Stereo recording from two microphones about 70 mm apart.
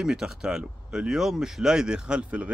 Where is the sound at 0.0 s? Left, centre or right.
Centre.